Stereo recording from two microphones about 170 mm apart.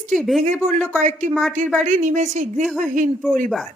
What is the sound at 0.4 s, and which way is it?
Speech, 45° right (ahead or behind).